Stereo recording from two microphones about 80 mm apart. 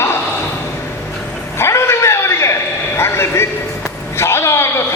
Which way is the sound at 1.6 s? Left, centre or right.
Left.